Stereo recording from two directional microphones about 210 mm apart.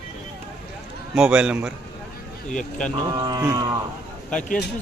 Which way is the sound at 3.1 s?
20° right (ahead or behind).